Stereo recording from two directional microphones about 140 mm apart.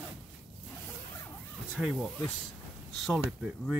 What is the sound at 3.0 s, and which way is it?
Speech, 5° right (ahead or behind).